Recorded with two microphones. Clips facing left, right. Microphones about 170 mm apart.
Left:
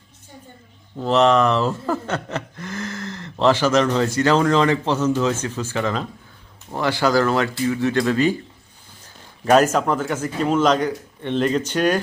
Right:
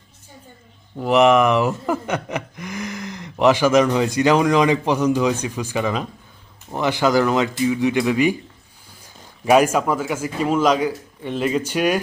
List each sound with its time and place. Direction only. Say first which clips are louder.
0.9 s speech: right 2 dB; 15° right (ahead or behind)